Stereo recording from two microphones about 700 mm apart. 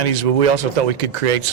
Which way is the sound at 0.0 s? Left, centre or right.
Right.